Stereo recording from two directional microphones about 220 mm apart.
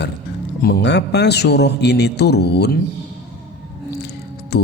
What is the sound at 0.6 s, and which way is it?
Speech, 50° left (ahead or behind).